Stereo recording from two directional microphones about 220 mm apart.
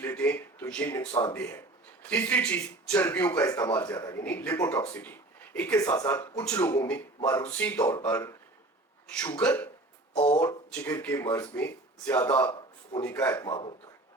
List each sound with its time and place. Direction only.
0.0 s speech: 10° left (ahead or behind)
10.2 s speech: 25° left (ahead or behind)
10.8 s speech: 10° left (ahead or behind)